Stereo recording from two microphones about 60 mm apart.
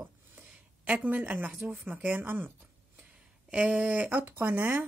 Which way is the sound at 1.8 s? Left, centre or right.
Right.